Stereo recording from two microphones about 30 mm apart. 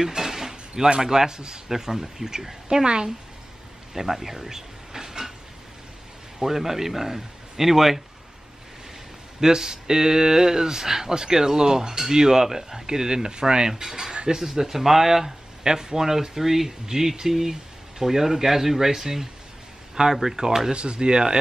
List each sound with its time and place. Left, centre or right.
0.0 s a sound: centre
1.0 s speech: centre
3.9 s a sound: centre
6.4 s speech: centre
9.4 s speech: centre
20.7 s speech: right